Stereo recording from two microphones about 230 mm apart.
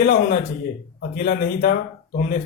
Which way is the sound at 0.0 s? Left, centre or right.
Left.